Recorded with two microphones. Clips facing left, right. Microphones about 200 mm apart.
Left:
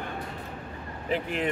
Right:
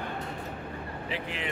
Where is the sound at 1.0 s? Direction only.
45° left (ahead or behind).